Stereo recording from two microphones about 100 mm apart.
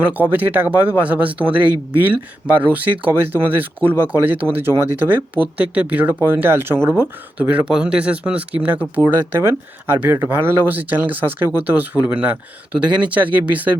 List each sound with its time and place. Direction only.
0.0 s speech: 15° right (ahead or behind)